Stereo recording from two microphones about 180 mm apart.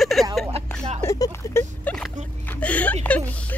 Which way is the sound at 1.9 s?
5° left (ahead or behind).